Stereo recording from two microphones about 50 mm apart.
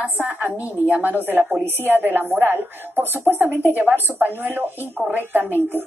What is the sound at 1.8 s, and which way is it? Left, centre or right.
A woman's voice, right.